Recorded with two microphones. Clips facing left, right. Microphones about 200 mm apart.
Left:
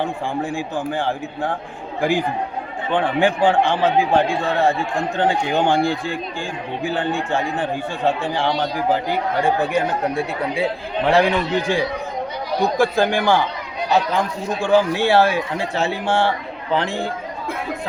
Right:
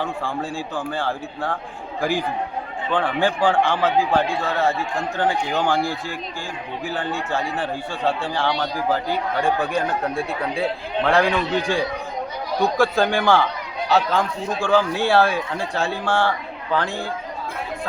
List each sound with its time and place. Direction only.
0.0 s speech: 25° left (ahead or behind)
10.2 s speech: 5° left (ahead or behind)
11.2 s speech: 20° left (ahead or behind)